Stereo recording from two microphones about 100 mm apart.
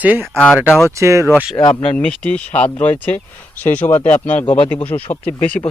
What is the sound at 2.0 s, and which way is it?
Speech, 15° left (ahead or behind).